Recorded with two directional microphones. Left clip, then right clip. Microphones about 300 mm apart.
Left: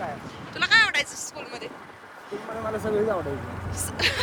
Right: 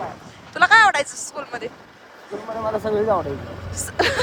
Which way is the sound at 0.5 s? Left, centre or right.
Right.